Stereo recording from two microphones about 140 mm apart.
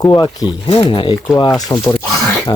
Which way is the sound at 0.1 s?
30° left (ahead or behind).